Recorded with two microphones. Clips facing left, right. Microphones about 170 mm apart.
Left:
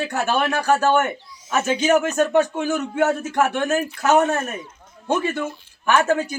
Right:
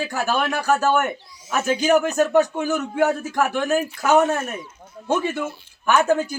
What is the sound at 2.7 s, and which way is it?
Speech, 5° left (ahead or behind).